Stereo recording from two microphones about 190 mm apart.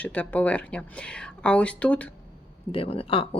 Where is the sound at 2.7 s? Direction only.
30° left (ahead or behind).